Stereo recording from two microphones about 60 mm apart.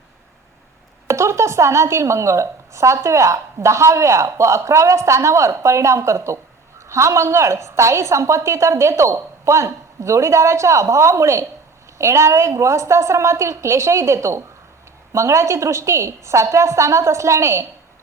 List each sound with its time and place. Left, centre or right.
1.0 s a woman's voice: right